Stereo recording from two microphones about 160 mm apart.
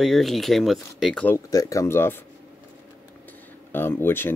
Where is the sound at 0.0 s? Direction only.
Centre (ahead or behind).